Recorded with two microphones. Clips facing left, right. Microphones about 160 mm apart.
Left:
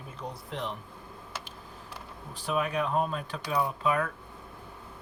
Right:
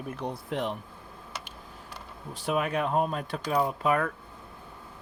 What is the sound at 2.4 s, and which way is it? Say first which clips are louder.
Speech: right 2 dB; 50° right (ahead or behind).